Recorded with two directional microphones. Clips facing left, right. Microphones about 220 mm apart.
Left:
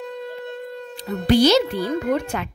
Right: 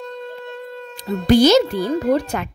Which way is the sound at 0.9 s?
45° right (ahead or behind).